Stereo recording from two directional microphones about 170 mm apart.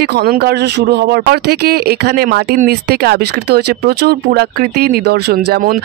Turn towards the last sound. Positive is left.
turn(degrees=-60)  # may be behind; listen again after turning